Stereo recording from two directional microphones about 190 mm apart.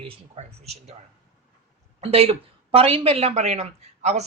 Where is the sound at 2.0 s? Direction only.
30° right (ahead or behind).